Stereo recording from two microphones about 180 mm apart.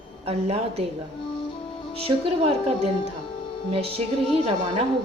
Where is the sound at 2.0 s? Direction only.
30° right (ahead or behind).